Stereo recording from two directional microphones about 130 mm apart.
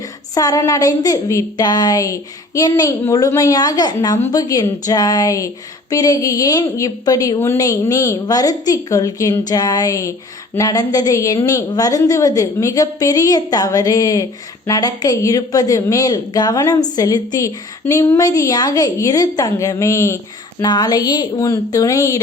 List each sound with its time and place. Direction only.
0.3 s a woman's voice: 25° left (ahead or behind)